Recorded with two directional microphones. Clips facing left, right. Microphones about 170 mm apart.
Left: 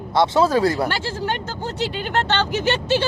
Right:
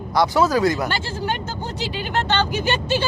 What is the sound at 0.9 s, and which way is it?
Speech, 85° left.